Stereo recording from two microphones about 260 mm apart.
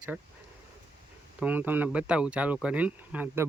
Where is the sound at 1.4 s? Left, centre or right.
Centre.